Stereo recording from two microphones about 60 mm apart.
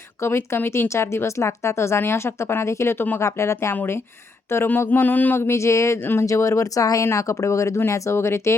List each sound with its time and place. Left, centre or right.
0.2 s a woman's voice: left
3.2 s a woman's voice: left
4.9 s a sound: left
5.4 s a woman's voice: left
6.0 s a sound: left
6.2 s speech: left
7.0 s a woman's voice: left